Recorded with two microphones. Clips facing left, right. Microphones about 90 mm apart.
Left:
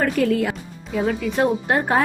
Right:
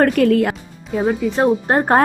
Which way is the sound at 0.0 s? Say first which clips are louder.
Right 6 dB; 55° right (ahead or behind).